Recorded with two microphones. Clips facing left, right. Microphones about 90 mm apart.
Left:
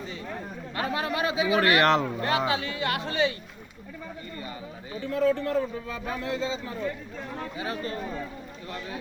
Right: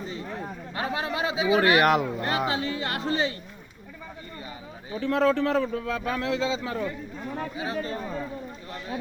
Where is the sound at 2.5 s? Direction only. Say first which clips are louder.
Left 1 dB; 35° right (ahead or behind).